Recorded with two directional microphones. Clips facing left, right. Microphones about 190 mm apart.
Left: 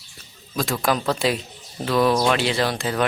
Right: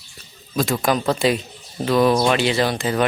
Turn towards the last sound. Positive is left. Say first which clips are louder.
# right 3 dB
turn(degrees=0)  # may be behind; listen again after turning